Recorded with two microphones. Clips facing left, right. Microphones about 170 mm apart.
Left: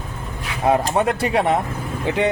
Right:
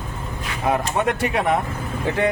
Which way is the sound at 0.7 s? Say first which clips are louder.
Left 3 dB; 30° left (ahead or behind).